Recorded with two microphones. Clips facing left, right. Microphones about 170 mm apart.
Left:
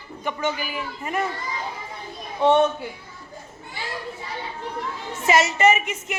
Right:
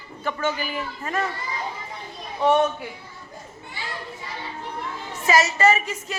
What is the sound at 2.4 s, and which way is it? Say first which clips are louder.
Speech: left 2 dB; 25° left (ahead or behind).